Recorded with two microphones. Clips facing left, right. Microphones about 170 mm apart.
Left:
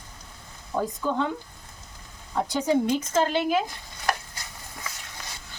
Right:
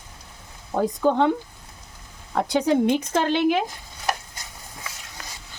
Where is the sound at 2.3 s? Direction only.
70° right (ahead or behind).